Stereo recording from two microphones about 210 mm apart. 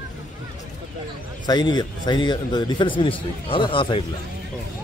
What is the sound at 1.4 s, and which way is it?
A man's voice, 20° left (ahead or behind).